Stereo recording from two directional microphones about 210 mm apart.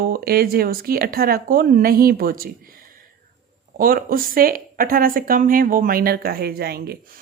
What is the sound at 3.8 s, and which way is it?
A woman's voice, 40° right (ahead or behind).